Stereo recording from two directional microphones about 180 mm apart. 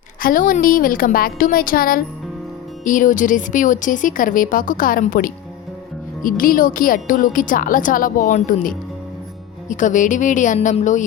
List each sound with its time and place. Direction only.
0.2 s speech: 50° left (ahead or behind)